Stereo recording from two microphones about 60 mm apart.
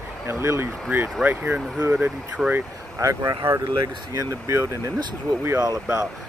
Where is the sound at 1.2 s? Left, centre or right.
Right.